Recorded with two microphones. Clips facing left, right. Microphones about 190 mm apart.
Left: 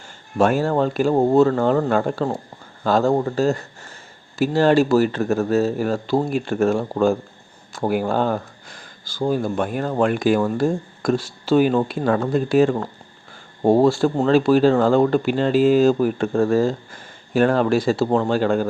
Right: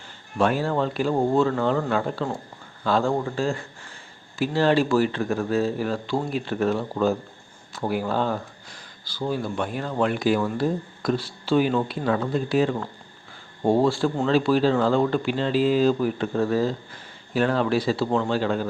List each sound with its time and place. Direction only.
0.3 s speech: 45° left (ahead or behind)